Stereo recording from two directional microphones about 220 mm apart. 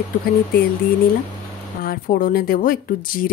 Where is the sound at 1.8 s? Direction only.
40° left (ahead or behind).